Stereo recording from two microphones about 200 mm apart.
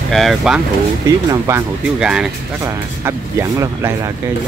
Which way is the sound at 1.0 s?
15° right (ahead or behind).